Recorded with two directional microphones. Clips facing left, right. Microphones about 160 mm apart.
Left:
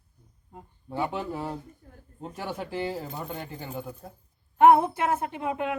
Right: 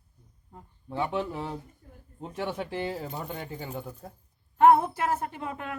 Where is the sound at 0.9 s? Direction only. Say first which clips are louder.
Even; 5° left (ahead or behind).